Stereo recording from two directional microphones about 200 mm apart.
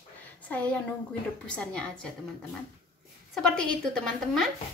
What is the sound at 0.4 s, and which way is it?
A woman's voice, 5° left (ahead or behind).